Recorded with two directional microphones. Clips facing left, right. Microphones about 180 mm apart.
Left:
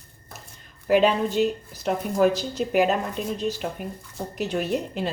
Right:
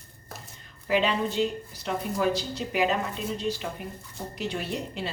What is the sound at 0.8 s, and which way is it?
Speech, 45° left (ahead or behind).